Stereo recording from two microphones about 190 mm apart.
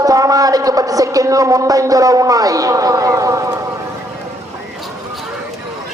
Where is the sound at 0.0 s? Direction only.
20° right (ahead or behind).